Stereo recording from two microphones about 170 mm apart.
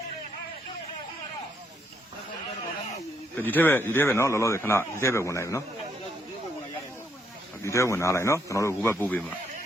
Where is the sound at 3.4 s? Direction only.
10° left (ahead or behind).